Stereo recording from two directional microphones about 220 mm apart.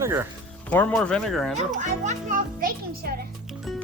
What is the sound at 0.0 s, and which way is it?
Speech, 10° right (ahead or behind).